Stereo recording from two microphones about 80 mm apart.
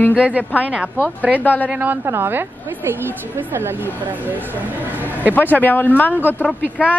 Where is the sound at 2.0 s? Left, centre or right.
Right.